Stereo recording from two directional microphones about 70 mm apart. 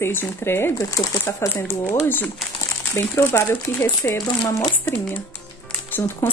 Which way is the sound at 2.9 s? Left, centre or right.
Left.